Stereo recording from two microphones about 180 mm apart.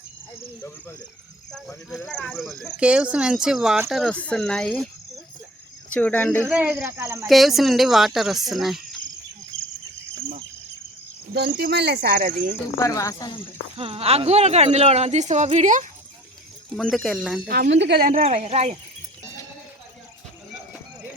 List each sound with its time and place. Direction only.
1.5 s speech: centre (ahead or behind)
6.5 s speech: 10° right (ahead or behind)
7.3 s speech: centre (ahead or behind)
11.3 s speech: 65° right (ahead or behind)
12.8 s speech: 20° left (ahead or behind)
13.7 s a woman's voice: 30° right (ahead or behind)
16.7 s speech: centre (ahead or behind)
17.7 s speech: 75° right (ahead or behind); by 18.2 s 55° right (ahead or behind)
18.2 s a woman's voice: 35° right (ahead or behind)